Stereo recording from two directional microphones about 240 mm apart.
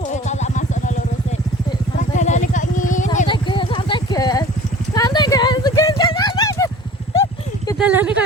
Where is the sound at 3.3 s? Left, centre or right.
Left.